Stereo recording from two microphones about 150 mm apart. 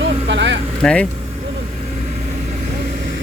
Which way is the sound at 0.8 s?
5° left (ahead or behind).